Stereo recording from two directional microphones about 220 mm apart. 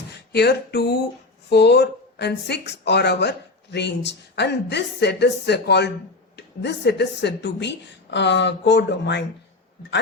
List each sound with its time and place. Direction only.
0.3 s speech: 45° left (ahead or behind)